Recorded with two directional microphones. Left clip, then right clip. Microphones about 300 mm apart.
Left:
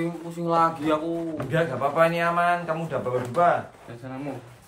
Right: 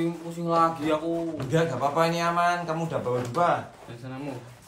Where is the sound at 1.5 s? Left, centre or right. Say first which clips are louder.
Even; centre.